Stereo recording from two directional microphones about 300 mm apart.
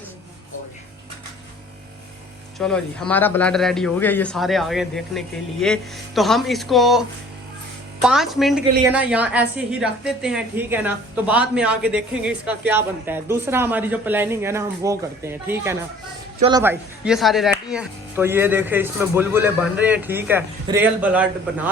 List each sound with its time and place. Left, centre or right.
2.6 s speech: centre
8.0 s speech: centre